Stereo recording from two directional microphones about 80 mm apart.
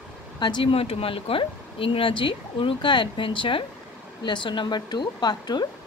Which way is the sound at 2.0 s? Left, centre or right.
Left.